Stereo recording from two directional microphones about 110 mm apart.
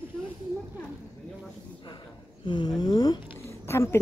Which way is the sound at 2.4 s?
45° left (ahead or behind).